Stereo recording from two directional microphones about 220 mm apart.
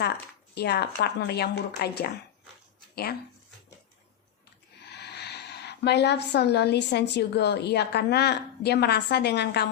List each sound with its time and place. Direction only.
0.5 s a woman's voice: 50° left (ahead or behind)
4.9 s a sound: 50° left (ahead or behind)
7.1 s a woman's voice: 50° left (ahead or behind)